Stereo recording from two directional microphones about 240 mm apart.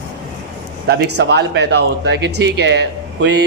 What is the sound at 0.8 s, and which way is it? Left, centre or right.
Speech, right.